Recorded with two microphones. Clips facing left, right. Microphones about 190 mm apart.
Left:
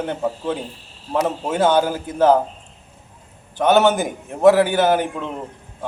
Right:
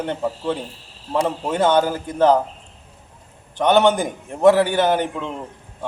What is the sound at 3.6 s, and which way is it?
A man's voice, 5° left (ahead or behind).